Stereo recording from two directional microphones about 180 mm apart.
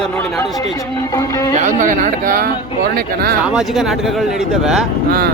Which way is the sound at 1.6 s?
45° right (ahead or behind).